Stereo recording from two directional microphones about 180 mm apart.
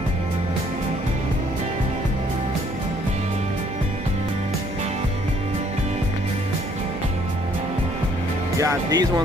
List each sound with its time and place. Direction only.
8.5 s speech: 20° right (ahead or behind)